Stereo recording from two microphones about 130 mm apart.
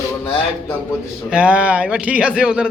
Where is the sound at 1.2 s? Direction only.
10° right (ahead or behind).